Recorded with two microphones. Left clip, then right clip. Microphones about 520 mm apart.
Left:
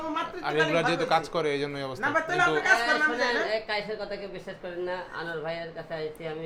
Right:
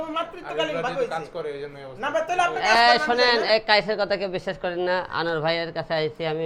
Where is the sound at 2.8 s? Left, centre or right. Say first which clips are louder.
Right 7 dB; right.